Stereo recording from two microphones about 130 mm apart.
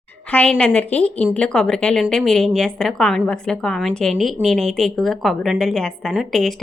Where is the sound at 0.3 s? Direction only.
10° left (ahead or behind).